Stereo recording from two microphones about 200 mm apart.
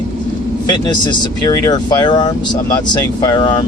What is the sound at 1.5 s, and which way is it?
Speech, 20° left (ahead or behind).